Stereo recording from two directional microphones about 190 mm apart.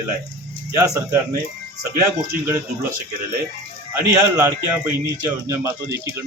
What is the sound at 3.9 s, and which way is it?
Speech, 15° right (ahead or behind).